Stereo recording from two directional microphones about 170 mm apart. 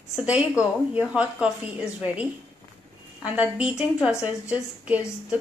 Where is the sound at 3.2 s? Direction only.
10° right (ahead or behind).